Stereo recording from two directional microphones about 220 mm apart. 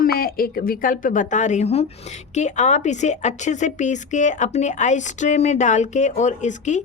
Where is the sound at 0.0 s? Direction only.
45° left (ahead or behind).